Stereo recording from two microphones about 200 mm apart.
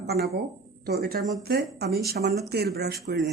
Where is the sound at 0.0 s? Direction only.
55° right (ahead or behind).